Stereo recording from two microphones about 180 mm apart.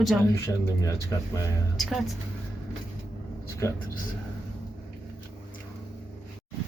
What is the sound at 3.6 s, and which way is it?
Speech, 15° left (ahead or behind).